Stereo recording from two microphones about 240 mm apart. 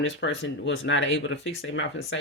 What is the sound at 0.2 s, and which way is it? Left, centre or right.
Speech, left.